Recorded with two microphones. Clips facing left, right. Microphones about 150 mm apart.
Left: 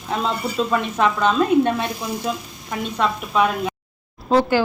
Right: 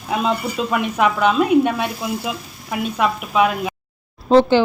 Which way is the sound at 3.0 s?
5° right (ahead or behind).